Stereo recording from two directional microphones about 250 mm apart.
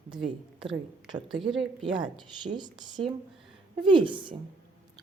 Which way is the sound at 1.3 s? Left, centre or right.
Centre.